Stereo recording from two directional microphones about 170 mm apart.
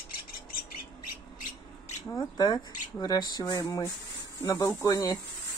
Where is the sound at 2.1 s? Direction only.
25° left (ahead or behind).